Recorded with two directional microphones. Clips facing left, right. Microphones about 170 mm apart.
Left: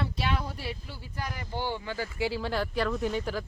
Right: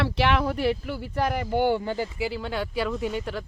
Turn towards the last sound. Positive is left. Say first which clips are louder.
# right 1 dB
turn(degrees=0)  # may be behind; listen again after turning